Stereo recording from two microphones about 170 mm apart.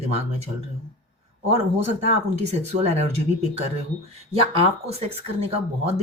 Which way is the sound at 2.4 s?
40° right (ahead or behind).